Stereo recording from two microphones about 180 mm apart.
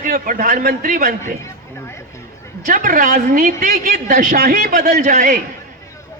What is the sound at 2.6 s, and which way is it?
Speech, 50° right (ahead or behind).